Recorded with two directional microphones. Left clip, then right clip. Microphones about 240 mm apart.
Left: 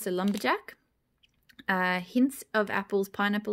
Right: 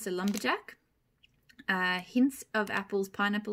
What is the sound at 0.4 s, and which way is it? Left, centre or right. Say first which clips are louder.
Speech: left 3 dB; left.